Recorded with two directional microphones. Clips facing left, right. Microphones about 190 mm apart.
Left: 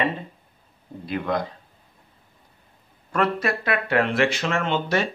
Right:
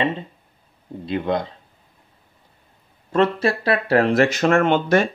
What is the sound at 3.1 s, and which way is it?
Speech, 25° right (ahead or behind).